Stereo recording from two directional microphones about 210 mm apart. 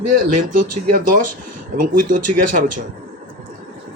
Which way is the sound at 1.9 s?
40° right (ahead or behind).